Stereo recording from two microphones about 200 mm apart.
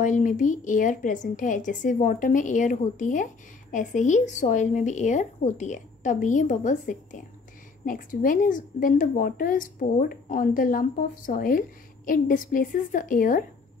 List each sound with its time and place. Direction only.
0.0 s a woman's voice: 40° left (ahead or behind)